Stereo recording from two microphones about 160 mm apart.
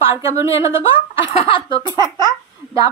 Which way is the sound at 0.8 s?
35° left (ahead or behind).